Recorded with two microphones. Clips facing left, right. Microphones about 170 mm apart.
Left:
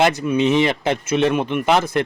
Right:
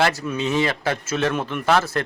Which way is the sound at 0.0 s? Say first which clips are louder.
Left 5 dB; 20° left (ahead or behind).